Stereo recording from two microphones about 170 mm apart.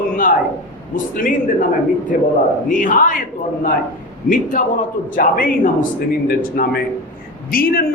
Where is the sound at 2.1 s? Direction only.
50° left (ahead or behind).